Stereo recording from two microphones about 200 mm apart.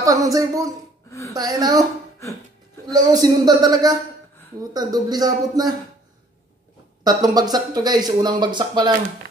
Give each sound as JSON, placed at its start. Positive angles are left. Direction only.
{"t": 0.0, "sound": "speech", "side_deg": -15}
{"t": 2.9, "sound": "speech", "side_deg": -20}
{"t": 7.1, "sound": "speech", "side_deg": -20}